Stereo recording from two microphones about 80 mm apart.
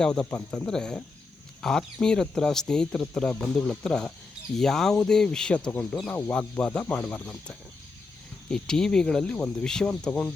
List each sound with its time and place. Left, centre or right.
0.0 s speech: centre
9.9 s speech: centre